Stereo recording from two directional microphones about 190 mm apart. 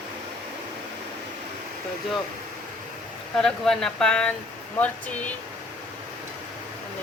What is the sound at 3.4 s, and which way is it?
Speech, centre (ahead or behind).